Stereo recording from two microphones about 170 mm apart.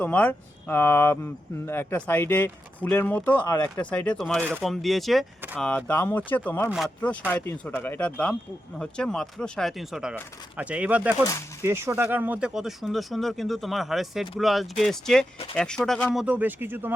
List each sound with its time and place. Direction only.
0.0 s speech: 10° left (ahead or behind)
3.4 s speech: 25° left (ahead or behind)
3.8 s speech: 5° left (ahead or behind)
6.7 s speech: centre (ahead or behind)
7.3 s speech: 10° left (ahead or behind)
16.1 s speech: 10° right (ahead or behind)